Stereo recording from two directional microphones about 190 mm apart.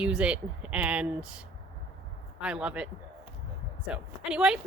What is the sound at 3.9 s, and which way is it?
Speech, 5° right (ahead or behind).